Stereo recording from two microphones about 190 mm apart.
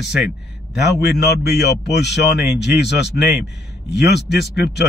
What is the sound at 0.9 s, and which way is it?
Speech, 60° left (ahead or behind).